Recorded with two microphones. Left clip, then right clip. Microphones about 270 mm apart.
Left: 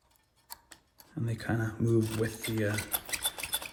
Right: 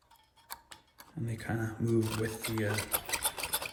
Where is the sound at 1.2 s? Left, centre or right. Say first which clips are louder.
Left 3 dB; left.